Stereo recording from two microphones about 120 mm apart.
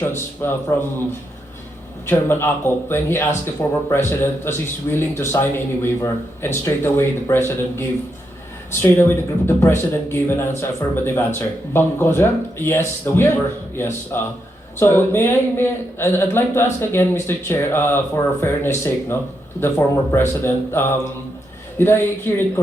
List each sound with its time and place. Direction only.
0.0 s speech: 20° left (ahead or behind)
2.0 s speech: 20° left (ahead or behind)